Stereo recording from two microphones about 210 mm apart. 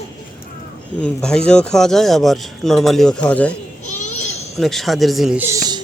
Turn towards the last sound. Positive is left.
turn(degrees=-15)  # may be behind; listen again after turning